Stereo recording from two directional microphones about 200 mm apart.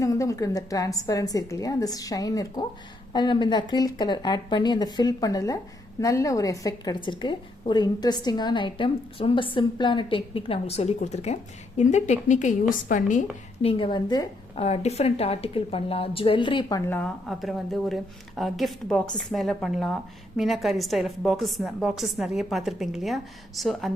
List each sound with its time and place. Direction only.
0.0 s a woman's voice: 15° left (ahead or behind); by 13.2 s 40° left (ahead or behind)
13.6 s a woman's voice: 25° left (ahead or behind)
14.5 s a woman's voice: 30° left (ahead or behind); by 23.9 s centre (ahead or behind)